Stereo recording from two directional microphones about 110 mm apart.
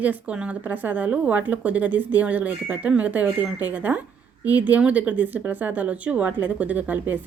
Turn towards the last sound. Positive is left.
turn(degrees=-15)  # may be behind; listen again after turning